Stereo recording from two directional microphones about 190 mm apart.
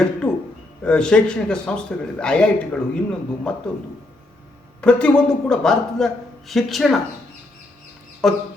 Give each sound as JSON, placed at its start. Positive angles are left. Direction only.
{"t": 0.0, "sound": "a sound", "side_deg": 5}
{"t": 0.9, "sound": "speech", "side_deg": 5}
{"t": 4.8, "sound": "speech", "side_deg": 5}
{"t": 8.2, "sound": "speech", "side_deg": 0}